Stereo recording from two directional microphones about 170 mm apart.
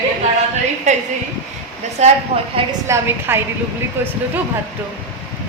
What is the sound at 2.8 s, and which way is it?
Speech, 15° right (ahead or behind).